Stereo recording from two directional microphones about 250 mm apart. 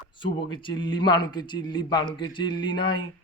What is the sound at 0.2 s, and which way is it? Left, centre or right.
A man's voice, centre.